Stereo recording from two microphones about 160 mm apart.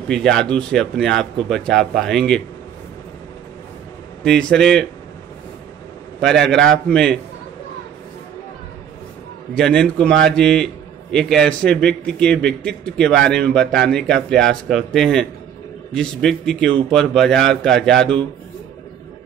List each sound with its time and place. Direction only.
0.1 s a man's voice: 5° left (ahead or behind)
4.2 s a man's voice: 5° left (ahead or behind)
6.2 s a man's voice: 5° left (ahead or behind)
9.6 s a man's voice: 5° left (ahead or behind)